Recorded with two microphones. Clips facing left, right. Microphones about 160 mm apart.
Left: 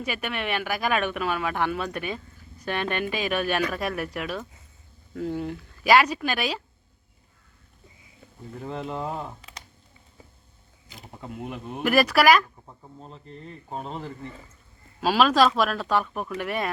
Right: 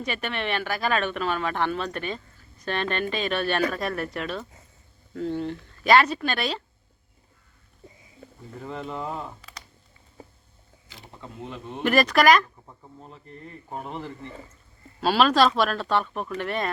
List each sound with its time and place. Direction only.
0.0 s speech: 10° left (ahead or behind)
8.6 s speech: 5° left (ahead or behind)
11.2 s speech: 15° left (ahead or behind)
13.0 s speech: 30° left (ahead or behind)
15.0 s speech: 5° left (ahead or behind)